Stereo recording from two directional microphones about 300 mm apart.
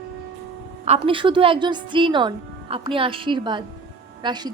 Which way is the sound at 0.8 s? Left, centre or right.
Centre.